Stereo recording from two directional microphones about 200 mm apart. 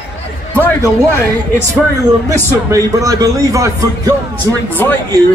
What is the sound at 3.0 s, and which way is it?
A man's voice, 15° right (ahead or behind).